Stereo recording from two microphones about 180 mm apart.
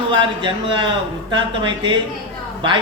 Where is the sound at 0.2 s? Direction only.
25° right (ahead or behind).